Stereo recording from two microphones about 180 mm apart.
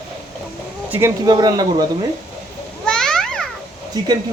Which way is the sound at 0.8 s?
10° right (ahead or behind).